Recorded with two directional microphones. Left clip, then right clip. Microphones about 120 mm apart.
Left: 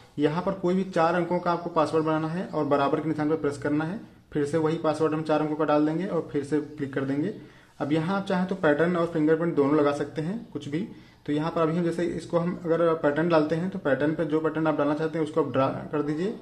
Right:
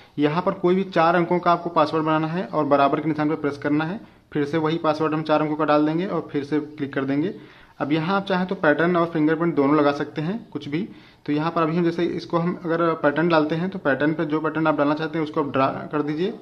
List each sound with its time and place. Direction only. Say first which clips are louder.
0.2 s a man's voice: right 5 dB; 20° right (ahead or behind)